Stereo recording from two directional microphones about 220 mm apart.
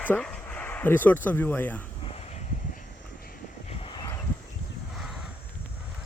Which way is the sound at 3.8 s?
20° left (ahead or behind).